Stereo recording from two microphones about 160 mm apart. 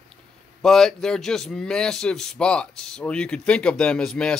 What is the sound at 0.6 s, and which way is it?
A man's voice, 5° left (ahead or behind).